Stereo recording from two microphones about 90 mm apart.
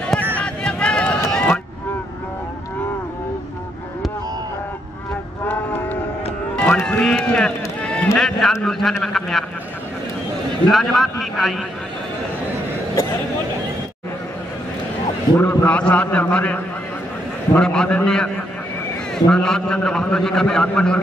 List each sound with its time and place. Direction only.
0.4 s a sound: 10° left (ahead or behind)
5.4 s cattle: 20° left (ahead or behind)
6.5 s run: 10° left (ahead or behind)
8.2 s a sound: 5° left (ahead or behind)
8.6 s a man's voice: 5° left (ahead or behind)
10.7 s a man's voice: centre (ahead or behind)
15.3 s a man's voice: 20° left (ahead or behind)